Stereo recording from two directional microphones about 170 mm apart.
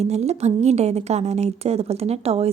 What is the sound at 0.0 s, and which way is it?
Speech, 40° right (ahead or behind).